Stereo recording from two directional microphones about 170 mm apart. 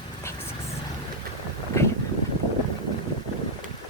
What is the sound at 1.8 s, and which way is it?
Boat, 15° left (ahead or behind).